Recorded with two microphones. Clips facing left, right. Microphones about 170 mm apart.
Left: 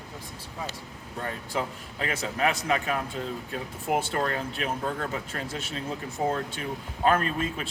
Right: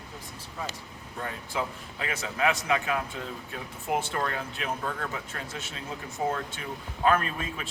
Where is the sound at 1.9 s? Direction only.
35° left (ahead or behind).